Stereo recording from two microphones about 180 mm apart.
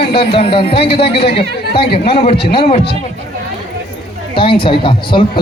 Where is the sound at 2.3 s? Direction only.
65° left (ahead or behind).